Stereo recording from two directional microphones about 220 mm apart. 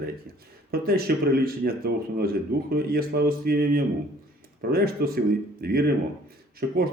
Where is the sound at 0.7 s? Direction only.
45° right (ahead or behind).